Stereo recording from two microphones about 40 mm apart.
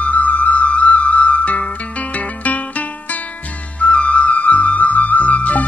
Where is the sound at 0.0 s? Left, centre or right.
Left.